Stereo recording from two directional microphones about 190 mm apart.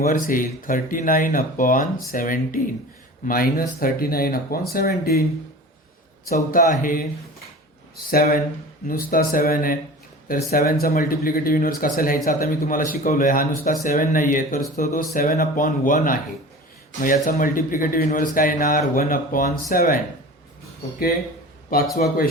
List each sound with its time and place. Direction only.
0.0 s speech: 45° left (ahead or behind)
6.3 s speech: 45° left (ahead or behind)
8.1 s speech: 50° left (ahead or behind)
21.9 s speech: 50° left (ahead or behind)